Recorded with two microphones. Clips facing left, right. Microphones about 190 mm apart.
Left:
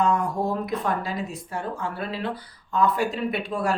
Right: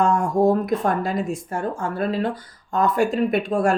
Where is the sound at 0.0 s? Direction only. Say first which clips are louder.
Right 5 dB; 45° right (ahead or behind).